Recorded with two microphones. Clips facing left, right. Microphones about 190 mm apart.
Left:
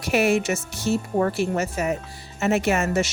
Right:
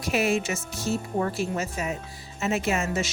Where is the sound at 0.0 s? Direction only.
70° left (ahead or behind).